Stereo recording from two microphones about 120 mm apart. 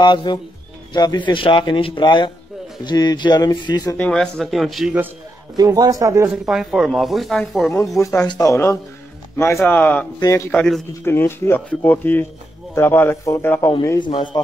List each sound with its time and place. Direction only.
0.0 s speech: 40° left (ahead or behind)
3.9 s speech: 10° left (ahead or behind)
5.6 s speech: 30° right (ahead or behind)
6.2 s speech: 5° right (ahead or behind)
8.0 s a man's voice: 25° left (ahead or behind)
10.5 s speech: 5° left (ahead or behind)
11.1 s a man's voice: 20° left (ahead or behind)
13.9 s speech: 40° left (ahead or behind)